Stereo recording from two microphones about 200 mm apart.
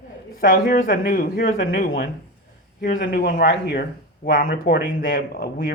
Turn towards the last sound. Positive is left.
turn(degrees=45)  # may be behind; listen again after turning